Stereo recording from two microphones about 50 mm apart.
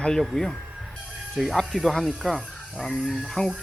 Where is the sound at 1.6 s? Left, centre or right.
Centre.